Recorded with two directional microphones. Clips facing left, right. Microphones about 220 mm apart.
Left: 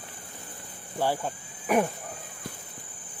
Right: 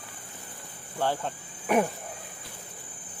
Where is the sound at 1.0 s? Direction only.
10° left (ahead or behind).